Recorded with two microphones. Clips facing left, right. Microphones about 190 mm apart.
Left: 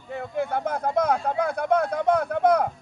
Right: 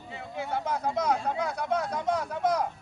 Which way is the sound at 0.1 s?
55° left (ahead or behind).